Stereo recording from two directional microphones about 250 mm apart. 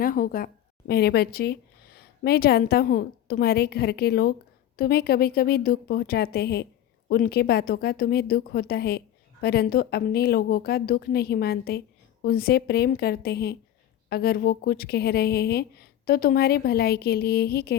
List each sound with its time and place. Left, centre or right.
0.0 s a woman's voice: left